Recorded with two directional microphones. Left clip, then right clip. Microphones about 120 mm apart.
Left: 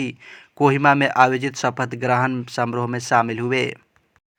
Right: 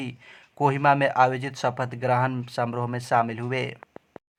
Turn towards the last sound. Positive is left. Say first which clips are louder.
# left 6 dB
turn(degrees=25)  # may be behind; listen again after turning